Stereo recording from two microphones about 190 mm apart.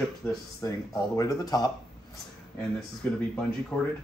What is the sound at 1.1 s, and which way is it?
Speech, 20° left (ahead or behind).